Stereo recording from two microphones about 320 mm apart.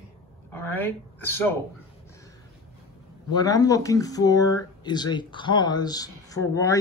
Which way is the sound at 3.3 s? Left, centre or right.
Centre.